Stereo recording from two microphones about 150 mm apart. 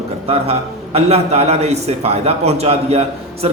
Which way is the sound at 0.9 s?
45° right (ahead or behind).